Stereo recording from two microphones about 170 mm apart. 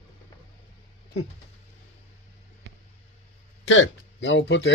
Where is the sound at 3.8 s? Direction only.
90° left.